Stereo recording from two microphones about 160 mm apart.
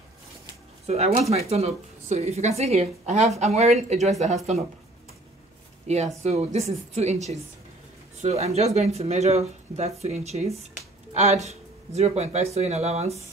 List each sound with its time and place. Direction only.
0.8 s speech: 40° right (ahead or behind)
5.9 s speech: 45° right (ahead or behind)